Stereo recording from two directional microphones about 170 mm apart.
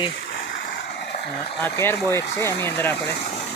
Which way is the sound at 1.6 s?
15° left (ahead or behind).